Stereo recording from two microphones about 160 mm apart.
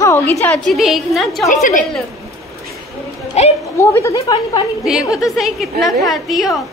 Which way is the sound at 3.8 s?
15° left (ahead or behind).